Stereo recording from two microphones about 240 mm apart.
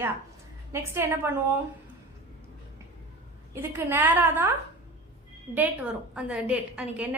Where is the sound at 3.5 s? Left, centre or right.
Centre.